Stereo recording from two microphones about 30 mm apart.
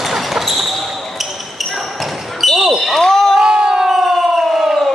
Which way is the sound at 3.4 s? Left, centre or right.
Right.